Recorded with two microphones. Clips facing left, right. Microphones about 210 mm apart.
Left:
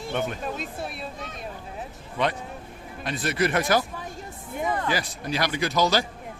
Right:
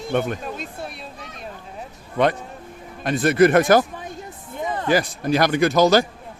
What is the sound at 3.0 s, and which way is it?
Speech, 50° right (ahead or behind).